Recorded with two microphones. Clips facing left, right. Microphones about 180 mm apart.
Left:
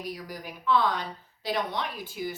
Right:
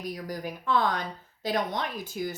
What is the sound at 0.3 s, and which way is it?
A woman's voice, 45° right (ahead or behind).